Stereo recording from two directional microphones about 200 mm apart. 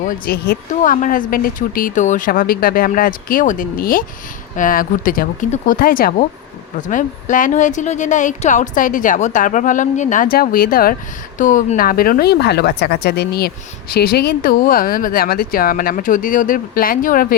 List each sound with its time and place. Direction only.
0.3 s speech: 50° left (ahead or behind)